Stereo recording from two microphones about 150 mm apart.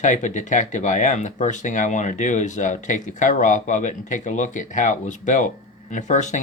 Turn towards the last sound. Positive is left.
turn(degrees=55)  # may be behind; listen again after turning